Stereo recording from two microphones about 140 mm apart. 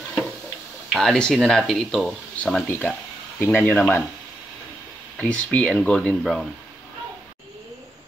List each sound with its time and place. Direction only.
0.9 s speech: 5° left (ahead or behind)
5.2 s speech: 10° left (ahead or behind)